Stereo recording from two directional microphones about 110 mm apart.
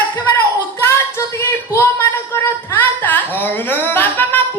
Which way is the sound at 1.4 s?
25° left (ahead or behind).